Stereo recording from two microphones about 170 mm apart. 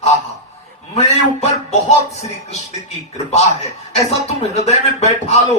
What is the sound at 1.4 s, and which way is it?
Speech, 40° left (ahead or behind).